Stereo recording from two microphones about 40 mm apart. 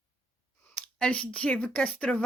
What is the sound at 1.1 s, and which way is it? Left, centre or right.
A woman's voice, left.